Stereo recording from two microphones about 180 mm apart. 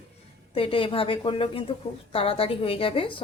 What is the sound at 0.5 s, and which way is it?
A woman's voice, 30° left (ahead or behind).